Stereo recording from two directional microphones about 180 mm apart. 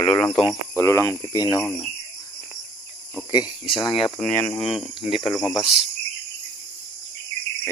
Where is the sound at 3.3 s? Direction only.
25° left (ahead or behind).